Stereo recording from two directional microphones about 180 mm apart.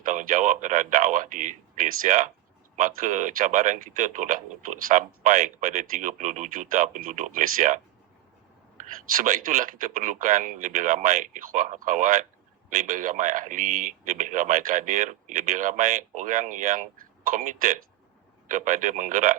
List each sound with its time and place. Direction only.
0.0 s speech: 45° right (ahead or behind)
8.8 s speech: 40° right (ahead or behind)